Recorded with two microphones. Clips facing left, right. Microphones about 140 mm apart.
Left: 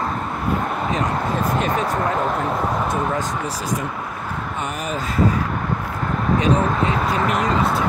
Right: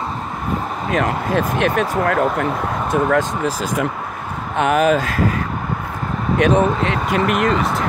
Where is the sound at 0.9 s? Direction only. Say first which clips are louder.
Right 7 dB; 75° right (ahead or behind).